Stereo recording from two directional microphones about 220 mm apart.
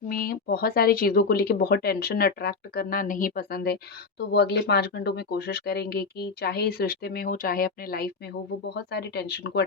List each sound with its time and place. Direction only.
0.1 s speech: 40° left (ahead or behind)